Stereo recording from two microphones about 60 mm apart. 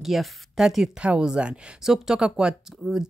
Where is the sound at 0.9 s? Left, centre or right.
Centre.